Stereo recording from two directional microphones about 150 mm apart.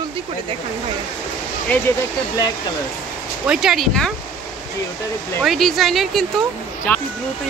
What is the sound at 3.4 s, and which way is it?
Speech, 5° right (ahead or behind).